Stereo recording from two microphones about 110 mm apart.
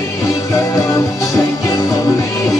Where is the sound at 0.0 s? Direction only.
30° left (ahead or behind).